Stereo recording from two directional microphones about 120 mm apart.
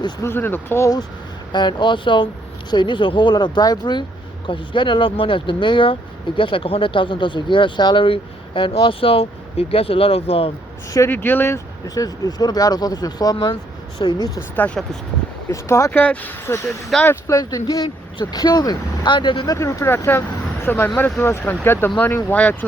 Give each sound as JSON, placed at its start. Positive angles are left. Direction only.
{"t": 0.3, "sound": "speech", "side_deg": 20}
{"t": 1.5, "sound": "speech", "side_deg": 40}
{"t": 11.1, "sound": "speech", "side_deg": 15}
{"t": 14.5, "sound": "speech", "side_deg": 15}
{"t": 15.4, "sound": "speech", "side_deg": 25}
{"t": 17.1, "sound": "speech", "side_deg": 25}
{"t": 17.8, "sound": "speech", "side_deg": 35}
{"t": 19.5, "sound": "speech", "side_deg": 25}